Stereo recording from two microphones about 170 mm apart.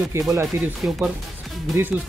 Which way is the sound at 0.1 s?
15° right (ahead or behind).